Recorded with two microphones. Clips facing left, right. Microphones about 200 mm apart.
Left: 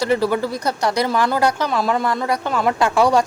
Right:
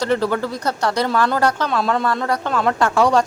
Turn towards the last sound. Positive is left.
turn(degrees=10)  # may be behind; listen again after turning